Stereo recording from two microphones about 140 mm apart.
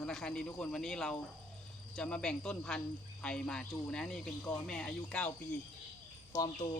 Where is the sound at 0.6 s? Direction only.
5° left (ahead or behind).